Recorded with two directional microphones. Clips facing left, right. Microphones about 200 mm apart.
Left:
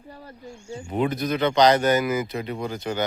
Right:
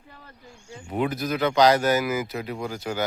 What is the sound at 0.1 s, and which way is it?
Wild animals, 35° left (ahead or behind).